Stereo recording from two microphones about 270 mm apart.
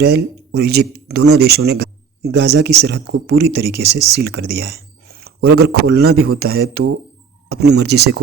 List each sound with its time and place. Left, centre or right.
0.0 s speech: right